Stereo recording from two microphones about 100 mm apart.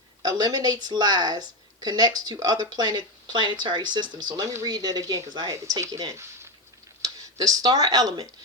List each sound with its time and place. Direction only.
0.2 s a woman's voice: 45° right (ahead or behind)